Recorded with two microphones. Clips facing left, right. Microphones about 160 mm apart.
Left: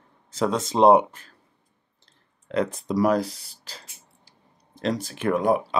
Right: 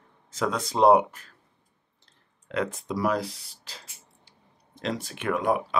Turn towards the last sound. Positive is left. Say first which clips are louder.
# left 4 dB
turn(degrees=35)  # may be behind; listen again after turning